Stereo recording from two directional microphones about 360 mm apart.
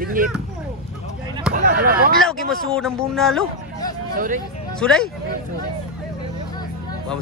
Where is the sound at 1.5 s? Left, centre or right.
Right.